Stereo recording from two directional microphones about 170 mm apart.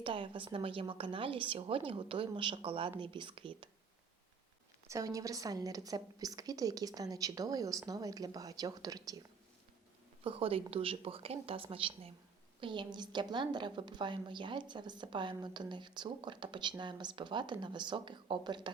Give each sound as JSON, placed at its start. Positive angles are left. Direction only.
{"t": 0.0, "sound": "a woman's voice", "side_deg": -30}
{"t": 4.9, "sound": "a woman's voice", "side_deg": -20}
{"t": 10.2, "sound": "a woman's voice", "side_deg": -35}